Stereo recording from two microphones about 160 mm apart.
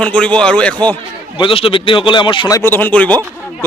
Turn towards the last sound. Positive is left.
turn(degrees=10)  # may be behind; listen again after turning